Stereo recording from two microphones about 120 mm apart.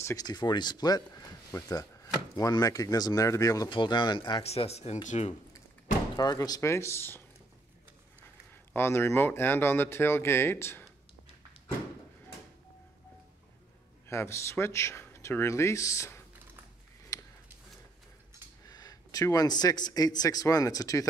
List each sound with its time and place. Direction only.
0.0 s speech: 30° left (ahead or behind)
3.7 s speech: 40° left (ahead or behind)
4.4 s speech: 60° left (ahead or behind)
5.0 s speech: 75° left (ahead or behind)
6.1 s speech: 35° left (ahead or behind); by 7.2 s 20° left (ahead or behind)
8.7 s speech: 20° left (ahead or behind)
14.0 s speech: 20° left (ahead or behind)
17.1 s a sound: 30° left (ahead or behind)
18.7 s a man's voice: 30° left (ahead or behind)